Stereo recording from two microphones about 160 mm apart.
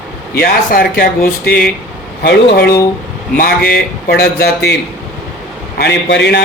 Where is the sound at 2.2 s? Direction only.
85° left.